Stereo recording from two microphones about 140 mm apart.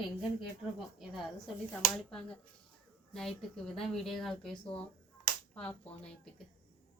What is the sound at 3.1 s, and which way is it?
A woman's voice, 5° left (ahead or behind).